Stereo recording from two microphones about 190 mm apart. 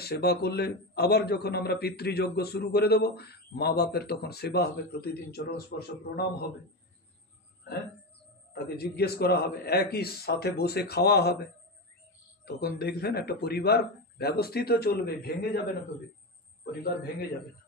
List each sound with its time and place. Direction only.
0.0 s a man's voice: 55° left (ahead or behind)
8.7 s a man's voice: 55° left (ahead or behind)
12.4 s a man's voice: 55° left (ahead or behind)